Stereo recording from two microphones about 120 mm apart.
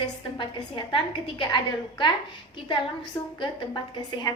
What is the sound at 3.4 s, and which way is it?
Speech, 40° left (ahead or behind).